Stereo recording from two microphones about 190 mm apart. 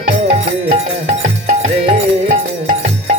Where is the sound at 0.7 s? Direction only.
40° right (ahead or behind).